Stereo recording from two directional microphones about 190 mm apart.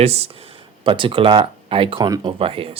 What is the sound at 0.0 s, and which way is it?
Speech, 35° right (ahead or behind).